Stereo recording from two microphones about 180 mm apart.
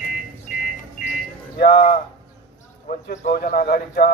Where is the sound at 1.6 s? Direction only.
55° left (ahead or behind).